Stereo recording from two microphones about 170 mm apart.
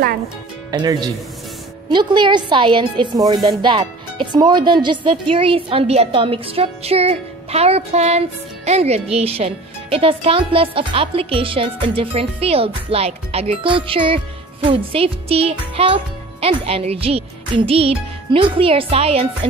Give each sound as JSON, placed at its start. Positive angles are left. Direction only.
{"t": 0.7, "sound": "a woman's voice", "side_deg": -25}